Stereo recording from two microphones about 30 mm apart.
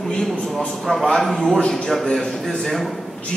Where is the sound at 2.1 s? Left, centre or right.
Centre.